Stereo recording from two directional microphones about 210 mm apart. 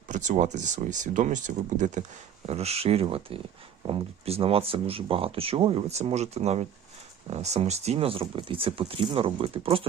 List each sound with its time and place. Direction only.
0.1 s speech: 35° right (ahead or behind)